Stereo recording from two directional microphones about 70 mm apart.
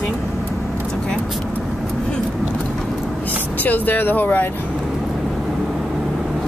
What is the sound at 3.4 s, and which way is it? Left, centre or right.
Speech, left.